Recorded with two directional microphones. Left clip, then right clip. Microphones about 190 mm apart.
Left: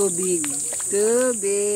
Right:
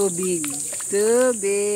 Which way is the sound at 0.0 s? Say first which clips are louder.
Even; 25° right (ahead or behind).